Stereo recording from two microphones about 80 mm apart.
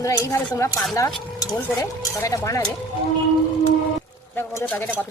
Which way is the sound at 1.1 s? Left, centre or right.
Centre.